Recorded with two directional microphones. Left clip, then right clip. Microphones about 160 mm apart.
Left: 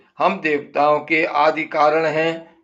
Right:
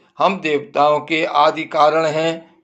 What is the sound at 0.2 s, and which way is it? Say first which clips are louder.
Speech: right 2 dB; 30° right (ahead or behind).